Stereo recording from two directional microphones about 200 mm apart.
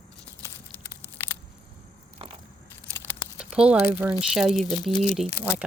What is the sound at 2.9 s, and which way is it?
Patter, 10° left (ahead or behind).